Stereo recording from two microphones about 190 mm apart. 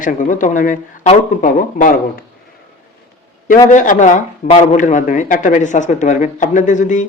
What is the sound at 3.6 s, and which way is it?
A man's voice, 40° left (ahead or behind).